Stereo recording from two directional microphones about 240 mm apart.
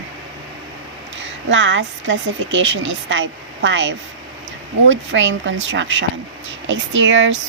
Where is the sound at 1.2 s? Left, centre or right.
Right.